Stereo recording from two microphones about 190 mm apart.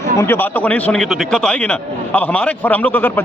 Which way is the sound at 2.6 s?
10° left (ahead or behind).